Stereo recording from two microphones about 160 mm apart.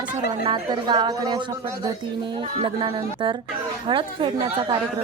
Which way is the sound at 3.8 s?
30° right (ahead or behind).